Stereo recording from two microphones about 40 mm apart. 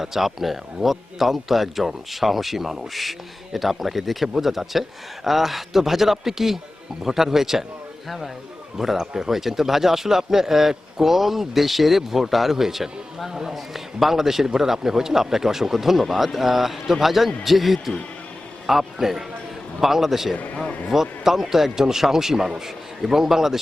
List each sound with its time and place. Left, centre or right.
0.0 s speech: centre
8.8 s speech: centre